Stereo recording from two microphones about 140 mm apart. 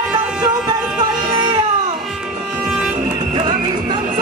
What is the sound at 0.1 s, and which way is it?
Music, 30° right (ahead or behind).